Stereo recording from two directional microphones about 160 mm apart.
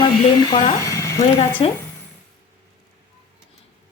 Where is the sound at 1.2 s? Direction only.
35° left (ahead or behind).